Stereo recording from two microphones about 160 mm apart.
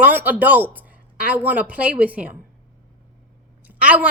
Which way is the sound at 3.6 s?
10° right (ahead or behind).